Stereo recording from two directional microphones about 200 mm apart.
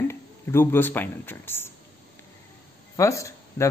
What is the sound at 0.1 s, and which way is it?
Speech, 10° left (ahead or behind).